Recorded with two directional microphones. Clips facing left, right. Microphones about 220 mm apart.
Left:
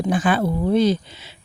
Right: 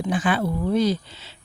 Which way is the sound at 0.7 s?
25° left (ahead or behind).